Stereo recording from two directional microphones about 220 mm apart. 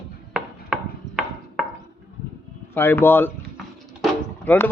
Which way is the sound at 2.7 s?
10° left (ahead or behind).